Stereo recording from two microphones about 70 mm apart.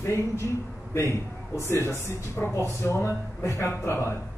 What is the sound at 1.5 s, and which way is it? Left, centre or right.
A man's voice, left.